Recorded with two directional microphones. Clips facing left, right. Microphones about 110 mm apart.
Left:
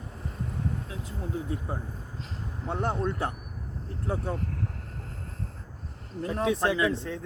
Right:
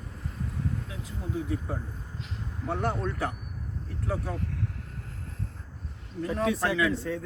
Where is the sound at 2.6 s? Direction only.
25° left (ahead or behind).